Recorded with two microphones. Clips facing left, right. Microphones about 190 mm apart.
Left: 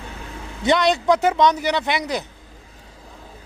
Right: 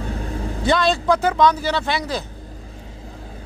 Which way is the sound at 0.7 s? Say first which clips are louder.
Left 1 dB; 20° left (ahead or behind).